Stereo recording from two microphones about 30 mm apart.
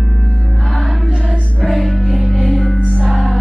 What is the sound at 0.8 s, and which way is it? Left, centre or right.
Music, centre.